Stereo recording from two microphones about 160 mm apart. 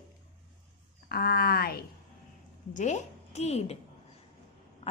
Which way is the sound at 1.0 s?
70° left (ahead or behind).